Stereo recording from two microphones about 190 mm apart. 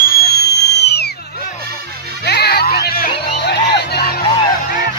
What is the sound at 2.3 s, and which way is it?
Music, 55° left (ahead or behind).